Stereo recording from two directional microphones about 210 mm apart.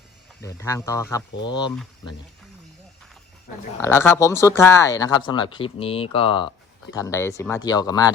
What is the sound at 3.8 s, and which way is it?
Speech, 10° left (ahead or behind).